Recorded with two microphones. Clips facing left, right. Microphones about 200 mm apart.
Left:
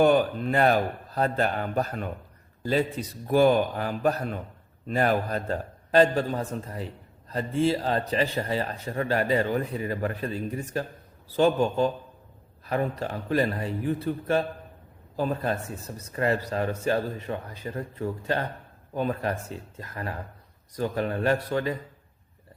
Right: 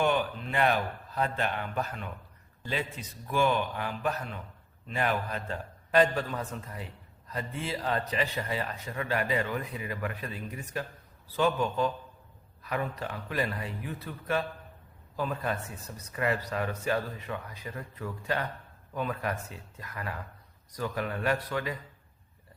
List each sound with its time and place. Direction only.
0.0 s a man's voice: 40° left (ahead or behind)
15.1 s a man's voice: 35° left (ahead or behind)